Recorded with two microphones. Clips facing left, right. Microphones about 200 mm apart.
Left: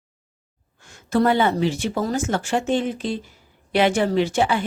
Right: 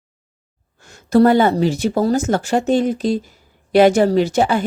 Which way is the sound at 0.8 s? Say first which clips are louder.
Right 7 dB; 40° right (ahead or behind).